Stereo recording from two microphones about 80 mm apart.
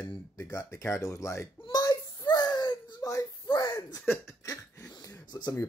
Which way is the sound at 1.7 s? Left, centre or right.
Left.